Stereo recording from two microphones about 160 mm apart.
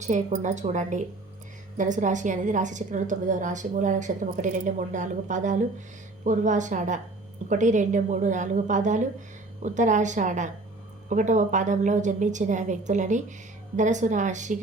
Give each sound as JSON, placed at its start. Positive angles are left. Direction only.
{"t": 0.0, "sound": "a woman's voice", "side_deg": -50}